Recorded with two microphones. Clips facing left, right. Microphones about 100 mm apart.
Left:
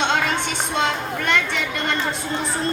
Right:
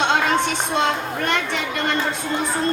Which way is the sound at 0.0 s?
40° right (ahead or behind).